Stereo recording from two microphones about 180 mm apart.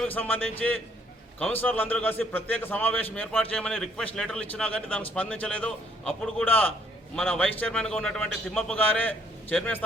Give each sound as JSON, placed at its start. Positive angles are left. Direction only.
{"t": 0.1, "sound": "a man's voice", "side_deg": 10}